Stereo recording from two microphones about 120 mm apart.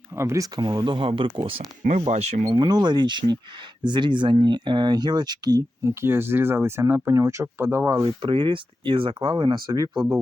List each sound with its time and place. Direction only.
0.2 s speech: 25° right (ahead or behind); by 1.6 s 50° right (ahead or behind)
2.0 s speech: 70° right (ahead or behind)
2.5 s speech: 35° right (ahead or behind); by 7.9 s 20° right (ahead or behind)
8.0 s speech: 45° right (ahead or behind)